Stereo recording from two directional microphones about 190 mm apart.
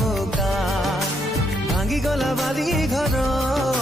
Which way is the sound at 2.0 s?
Centre (ahead or behind).